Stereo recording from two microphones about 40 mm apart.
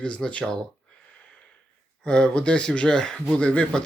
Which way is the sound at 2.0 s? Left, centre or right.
Left.